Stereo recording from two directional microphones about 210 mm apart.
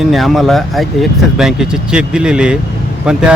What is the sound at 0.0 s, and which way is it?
Speech, centre (ahead or behind).